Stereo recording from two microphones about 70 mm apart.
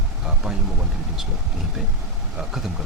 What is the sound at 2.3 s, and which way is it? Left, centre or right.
Speech, centre.